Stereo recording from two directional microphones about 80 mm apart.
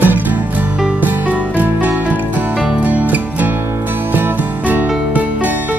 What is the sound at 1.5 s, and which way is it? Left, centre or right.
Music, right.